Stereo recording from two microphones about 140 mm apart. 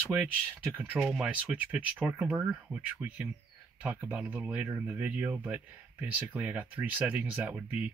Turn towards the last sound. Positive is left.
turn(degrees=-10)  # may be behind; listen again after turning